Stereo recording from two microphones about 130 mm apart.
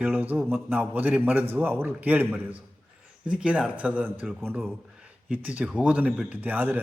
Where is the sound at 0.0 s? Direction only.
10° right (ahead or behind).